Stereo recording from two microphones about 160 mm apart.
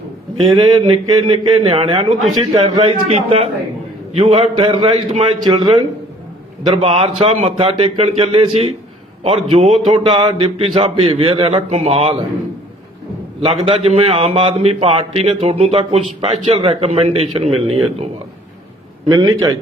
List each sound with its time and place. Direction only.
0.6 s a man's voice: 25° right (ahead or behind)
6.7 s a man's voice: 35° right (ahead or behind)
13.4 s a man's voice: 40° right (ahead or behind)
19.0 s a man's voice: 25° right (ahead or behind)